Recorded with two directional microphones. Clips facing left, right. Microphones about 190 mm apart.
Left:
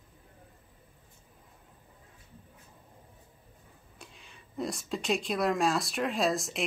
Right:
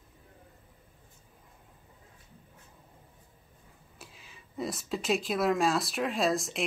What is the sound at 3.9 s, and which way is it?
Speech, 5° right (ahead or behind).